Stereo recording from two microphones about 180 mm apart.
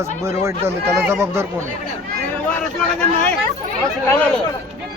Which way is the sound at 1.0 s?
15° right (ahead or behind).